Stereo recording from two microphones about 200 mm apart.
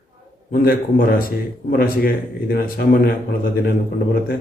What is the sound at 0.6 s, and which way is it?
Speech, 45° left (ahead or behind).